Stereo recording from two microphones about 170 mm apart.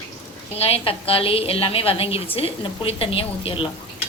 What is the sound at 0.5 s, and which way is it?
A woman's voice, 35° left (ahead or behind).